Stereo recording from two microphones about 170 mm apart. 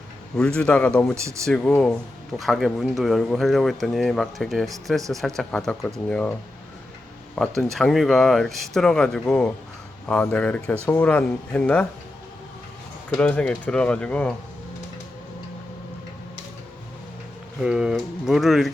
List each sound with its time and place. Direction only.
0.3 s speech: 5° left (ahead or behind)
1.1 s speech: 15° right (ahead or behind)
1.5 s speech: 5° left (ahead or behind)
7.3 s speech: 5° left (ahead or behind)
13.1 s speech: 5° left (ahead or behind)
17.6 s speech: 5° right (ahead or behind)